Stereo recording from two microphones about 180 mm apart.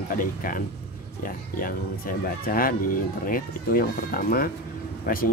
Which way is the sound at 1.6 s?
50° left (ahead or behind).